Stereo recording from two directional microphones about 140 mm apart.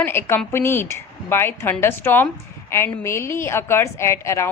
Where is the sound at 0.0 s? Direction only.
15° left (ahead or behind).